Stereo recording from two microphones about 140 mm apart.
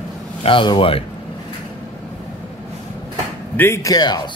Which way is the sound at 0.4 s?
40° left (ahead or behind).